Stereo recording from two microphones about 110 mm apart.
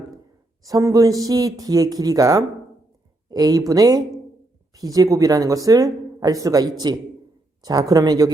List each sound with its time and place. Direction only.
0.6 s speech: 30° right (ahead or behind)